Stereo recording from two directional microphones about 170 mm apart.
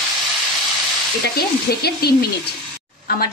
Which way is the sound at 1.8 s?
70° left (ahead or behind).